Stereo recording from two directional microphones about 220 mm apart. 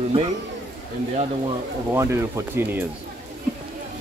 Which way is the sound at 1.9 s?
10° right (ahead or behind).